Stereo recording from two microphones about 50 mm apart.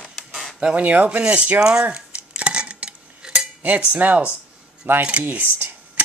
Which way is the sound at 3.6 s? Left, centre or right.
Right.